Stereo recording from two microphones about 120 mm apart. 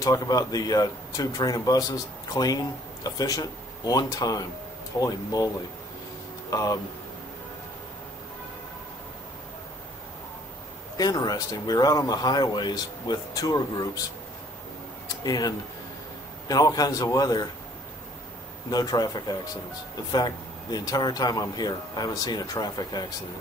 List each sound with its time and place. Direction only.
0.0 s speech: 30° left (ahead or behind)
6.5 s speech: 30° left (ahead or behind)
11.0 s speech: 30° left (ahead or behind)
15.0 s a sound: 35° left (ahead or behind)
16.4 s speech: 30° left (ahead or behind)
18.7 s speech: 35° left (ahead or behind)